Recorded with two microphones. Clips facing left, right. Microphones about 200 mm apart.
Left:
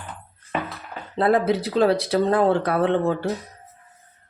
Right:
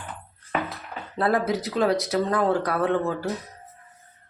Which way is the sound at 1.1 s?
25° left (ahead or behind).